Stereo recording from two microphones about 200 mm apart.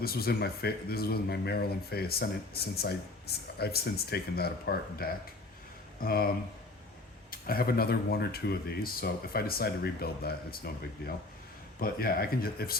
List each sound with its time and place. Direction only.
0.0 s speech: 50° left (ahead or behind)
11.8 s speech: 50° left (ahead or behind)